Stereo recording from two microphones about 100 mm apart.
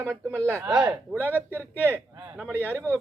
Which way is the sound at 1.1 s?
15° right (ahead or behind).